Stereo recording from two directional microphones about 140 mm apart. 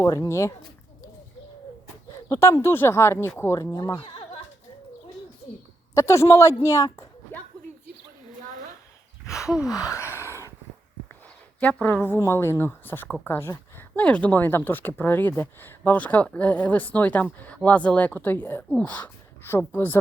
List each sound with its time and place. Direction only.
0.0 s speech: 20° left (ahead or behind)
2.3 s speech: 20° left (ahead or behind)
4.0 s a sound: 45° left (ahead or behind)
5.9 s speech: 20° left (ahead or behind)
9.5 s gasp: 5° right (ahead or behind)
9.7 s a sound: 20° left (ahead or behind)
11.6 s speech: 10° left (ahead or behind)